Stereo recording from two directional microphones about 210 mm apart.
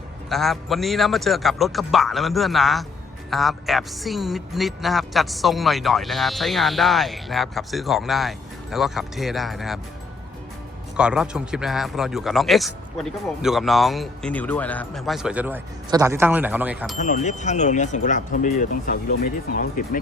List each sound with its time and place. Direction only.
0.3 s speech: centre (ahead or behind)
10.9 s speech: 5° right (ahead or behind)
17.0 s speech: 35° left (ahead or behind)